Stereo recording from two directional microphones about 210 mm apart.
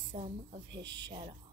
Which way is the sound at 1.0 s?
20° right (ahead or behind).